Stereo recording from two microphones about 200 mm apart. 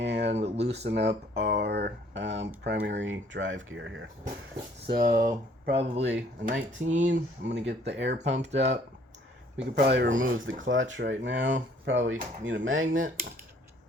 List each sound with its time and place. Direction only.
0.0 s a sound: 60° right (ahead or behind)
0.4 s a sound: 30° right (ahead or behind)
0.9 s speech: 55° right (ahead or behind)
4.9 s speech: 45° right (ahead or behind)
5.7 s speech: 30° right (ahead or behind)
6.0 s speech: 60° right (ahead or behind)
10.2 s speech: 75° right (ahead or behind)